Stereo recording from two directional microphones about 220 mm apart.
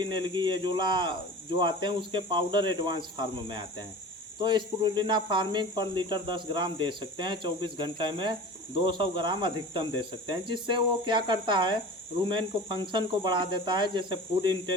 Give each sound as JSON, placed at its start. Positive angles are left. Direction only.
{"t": 0.0, "sound": "speech", "side_deg": -20}